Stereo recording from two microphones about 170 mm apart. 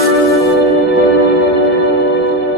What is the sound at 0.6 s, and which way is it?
Music, 65° left (ahead or behind).